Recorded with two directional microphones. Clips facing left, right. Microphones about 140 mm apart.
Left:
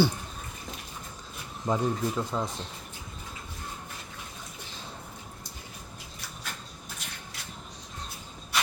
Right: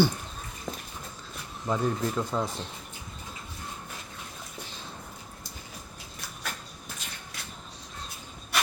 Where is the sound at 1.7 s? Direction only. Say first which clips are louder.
Left 1 dB; 20° left (ahead or behind).